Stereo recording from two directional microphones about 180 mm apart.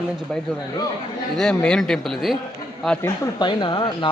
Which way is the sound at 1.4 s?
5° left (ahead or behind).